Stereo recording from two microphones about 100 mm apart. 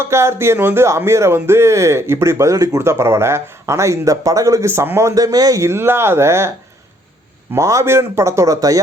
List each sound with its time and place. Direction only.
0.0 s speech: 25° right (ahead or behind)
7.5 s speech: 30° right (ahead or behind)